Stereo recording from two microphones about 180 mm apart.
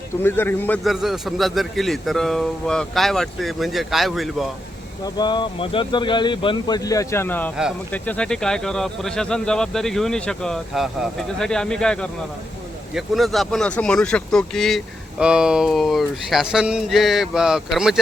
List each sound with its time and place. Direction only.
0.2 s a man's voice: 10° left (ahead or behind)
0.9 s speech: centre (ahead or behind)
5.0 s speech: 25° left (ahead or behind); by 18.0 s 5° right (ahead or behind)